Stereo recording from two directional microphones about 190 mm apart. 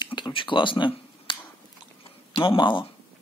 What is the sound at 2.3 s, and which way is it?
Speech, 25° left (ahead or behind).